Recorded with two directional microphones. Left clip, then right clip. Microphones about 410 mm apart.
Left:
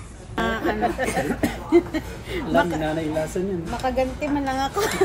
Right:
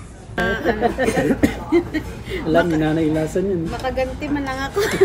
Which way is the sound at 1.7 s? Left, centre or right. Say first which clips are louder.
Even; centre.